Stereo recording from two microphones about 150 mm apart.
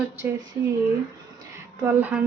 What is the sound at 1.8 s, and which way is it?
Speech, 15° right (ahead or behind).